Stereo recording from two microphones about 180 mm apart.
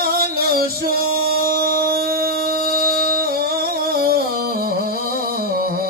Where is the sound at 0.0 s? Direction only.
55° right (ahead or behind).